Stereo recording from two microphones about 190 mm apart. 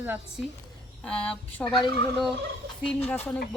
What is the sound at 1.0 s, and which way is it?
Speech, 5° left (ahead or behind).